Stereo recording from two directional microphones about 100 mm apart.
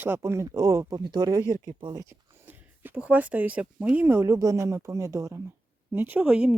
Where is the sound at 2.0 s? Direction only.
25° right (ahead or behind).